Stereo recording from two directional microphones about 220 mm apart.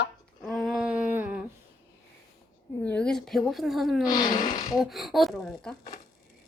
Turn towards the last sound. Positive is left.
turn(degrees=0)  # may be behind; listen again after turning